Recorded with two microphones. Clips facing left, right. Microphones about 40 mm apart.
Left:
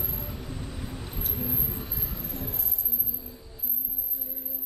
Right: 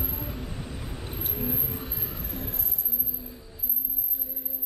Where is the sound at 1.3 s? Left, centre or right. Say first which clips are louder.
Right 2 dB; centre.